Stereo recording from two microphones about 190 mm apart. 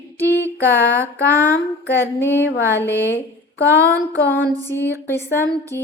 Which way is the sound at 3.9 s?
75° left (ahead or behind).